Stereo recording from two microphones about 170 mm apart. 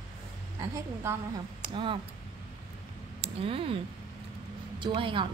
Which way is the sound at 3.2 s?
35° right (ahead or behind).